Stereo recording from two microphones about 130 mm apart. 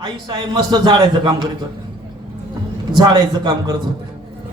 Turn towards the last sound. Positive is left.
turn(degrees=-35)  # may be behind; listen again after turning